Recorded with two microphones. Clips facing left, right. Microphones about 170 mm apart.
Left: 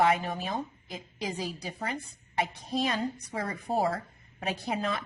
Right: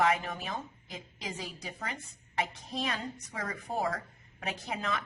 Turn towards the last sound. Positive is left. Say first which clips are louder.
# left 4 dB
turn(degrees=30)  # may be behind; listen again after turning